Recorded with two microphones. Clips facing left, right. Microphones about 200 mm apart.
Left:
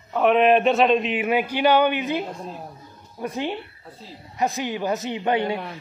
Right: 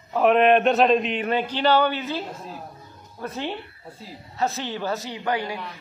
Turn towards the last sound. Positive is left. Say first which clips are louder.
# left 4 dB
turn(degrees=25)  # may be behind; listen again after turning